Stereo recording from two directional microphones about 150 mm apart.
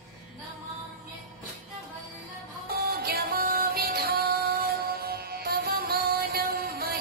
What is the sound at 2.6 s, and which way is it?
Music, 90° right.